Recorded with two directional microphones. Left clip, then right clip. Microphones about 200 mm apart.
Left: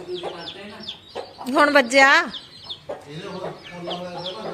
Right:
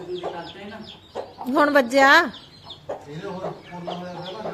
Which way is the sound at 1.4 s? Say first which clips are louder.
Left 2 dB; 10° right (ahead or behind).